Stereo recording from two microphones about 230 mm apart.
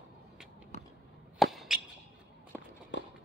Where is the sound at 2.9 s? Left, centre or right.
Left.